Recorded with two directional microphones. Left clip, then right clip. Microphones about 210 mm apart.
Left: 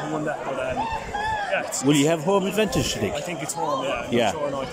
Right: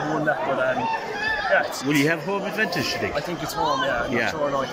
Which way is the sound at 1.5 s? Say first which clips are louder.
Right 8 dB; centre (ahead or behind).